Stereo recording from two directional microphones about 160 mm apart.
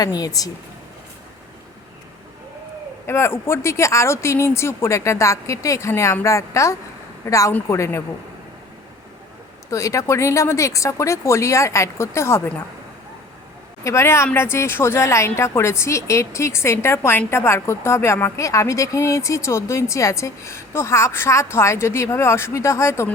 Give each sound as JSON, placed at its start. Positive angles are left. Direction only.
{"t": 0.0, "sound": "speech", "side_deg": 25}
{"t": 3.1, "sound": "a woman's voice", "side_deg": 15}
{"t": 9.6, "sound": "speech", "side_deg": 20}
{"t": 13.8, "sound": "a woman's voice", "side_deg": 15}